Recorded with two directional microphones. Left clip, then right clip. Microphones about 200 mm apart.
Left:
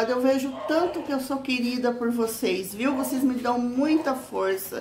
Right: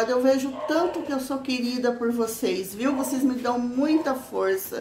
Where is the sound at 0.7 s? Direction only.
5° left (ahead or behind).